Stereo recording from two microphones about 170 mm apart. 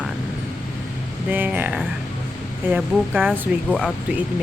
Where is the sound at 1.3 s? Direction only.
10° right (ahead or behind).